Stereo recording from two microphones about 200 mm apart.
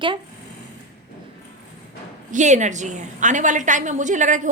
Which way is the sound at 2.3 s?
35° right (ahead or behind).